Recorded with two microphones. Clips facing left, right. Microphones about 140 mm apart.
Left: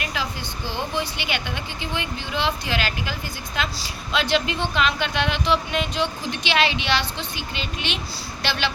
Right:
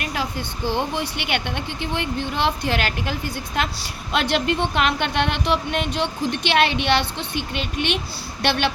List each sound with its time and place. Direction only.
0.7 s speech: 60° right (ahead or behind)